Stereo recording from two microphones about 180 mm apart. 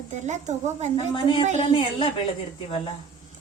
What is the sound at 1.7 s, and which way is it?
Speech, 25° left (ahead or behind).